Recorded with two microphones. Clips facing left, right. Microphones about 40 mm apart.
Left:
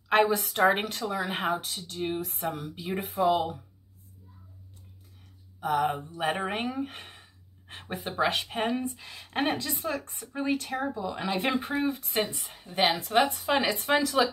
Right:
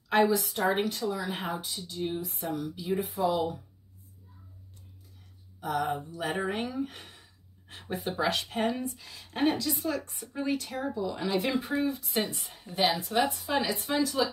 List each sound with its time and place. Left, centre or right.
0.1 s speech: left
5.6 s speech: left
8.8 s speech: left
12.4 s speech: left
12.7 s speech: left
14.0 s speech: left